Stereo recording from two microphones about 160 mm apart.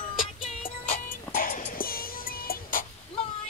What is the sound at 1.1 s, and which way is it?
Music, 60° left (ahead or behind).